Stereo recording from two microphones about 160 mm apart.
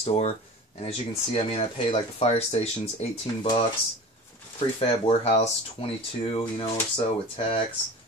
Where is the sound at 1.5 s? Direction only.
40° left (ahead or behind).